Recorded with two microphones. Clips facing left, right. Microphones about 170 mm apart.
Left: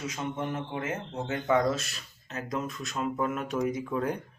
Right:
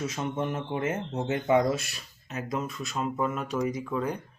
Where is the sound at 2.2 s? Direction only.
10° right (ahead or behind).